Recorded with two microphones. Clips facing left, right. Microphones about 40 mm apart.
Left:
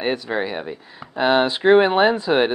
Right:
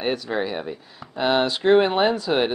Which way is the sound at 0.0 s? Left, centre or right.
Centre.